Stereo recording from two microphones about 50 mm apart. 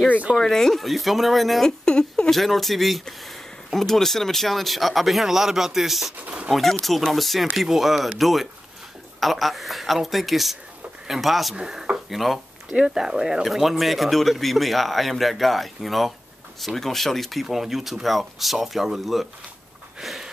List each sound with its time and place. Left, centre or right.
0.4 s speech: centre
1.9 s a sound: centre
2.3 s speech: centre
6.2 s speech: right
6.5 s speech: centre
11.5 s speech: centre
12.1 s speech: centre
20.0 s a sound: centre